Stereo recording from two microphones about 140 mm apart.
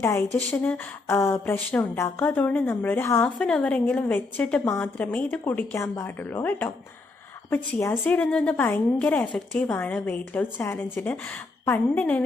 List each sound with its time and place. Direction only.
0.0 s speech: 20° left (ahead or behind)